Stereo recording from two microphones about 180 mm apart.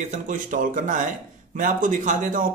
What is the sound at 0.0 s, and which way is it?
A man's voice, 45° right (ahead or behind).